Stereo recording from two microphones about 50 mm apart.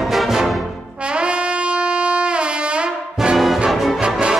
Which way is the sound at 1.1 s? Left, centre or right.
Right.